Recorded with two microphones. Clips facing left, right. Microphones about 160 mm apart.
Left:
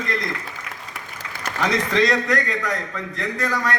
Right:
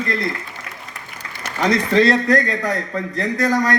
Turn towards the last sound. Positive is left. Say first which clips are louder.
# right 6 dB
turn(degrees=-35)  # may be behind; listen again after turning